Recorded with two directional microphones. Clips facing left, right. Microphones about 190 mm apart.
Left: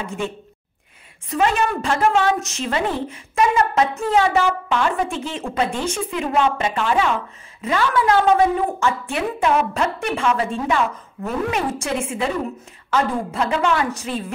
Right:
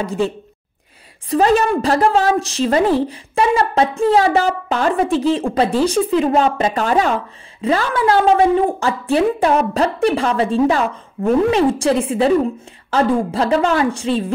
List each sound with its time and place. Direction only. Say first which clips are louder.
0.0 s a woman's voice: right 7 dB; 35° right (ahead or behind)
1.3 s a woman's voice: right 6 dB; 35° right (ahead or behind)
7.6 s a woman's voice: right 3 dB; 30° right (ahead or behind)